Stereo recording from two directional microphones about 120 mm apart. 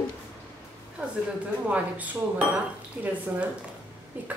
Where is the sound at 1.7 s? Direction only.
10° right (ahead or behind).